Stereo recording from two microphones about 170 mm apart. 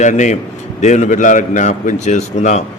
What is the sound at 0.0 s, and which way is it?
A man's voice, 45° left (ahead or behind).